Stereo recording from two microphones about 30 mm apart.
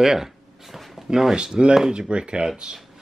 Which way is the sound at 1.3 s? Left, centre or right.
Right.